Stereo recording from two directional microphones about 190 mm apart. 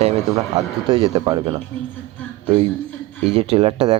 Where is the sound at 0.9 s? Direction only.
25° right (ahead or behind).